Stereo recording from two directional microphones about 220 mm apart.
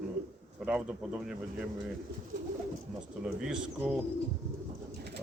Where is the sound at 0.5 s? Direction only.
5° right (ahead or behind).